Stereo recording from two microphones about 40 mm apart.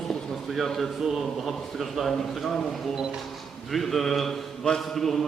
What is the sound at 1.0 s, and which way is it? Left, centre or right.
A man's voice, centre.